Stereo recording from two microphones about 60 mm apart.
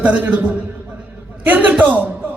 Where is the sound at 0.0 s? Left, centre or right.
Right.